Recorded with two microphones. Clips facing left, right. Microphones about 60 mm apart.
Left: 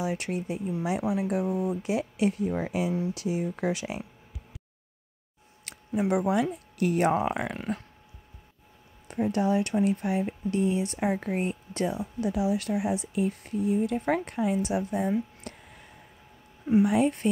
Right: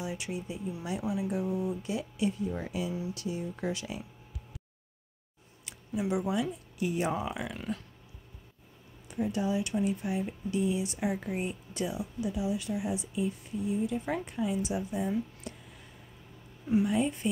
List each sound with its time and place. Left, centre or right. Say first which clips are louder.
0.0 s speech: left 6 dB; left
0.8 s speech: left 6 dB; left
1.2 s speech: left 4 dB; left
5.7 s speech: left 5 dB; left
9.0 s speech: left 5 dB; left
12.2 s speech: left 6 dB; left
15.5 s a sound: left 1 dB; left
16.8 s speech: left 5 dB; left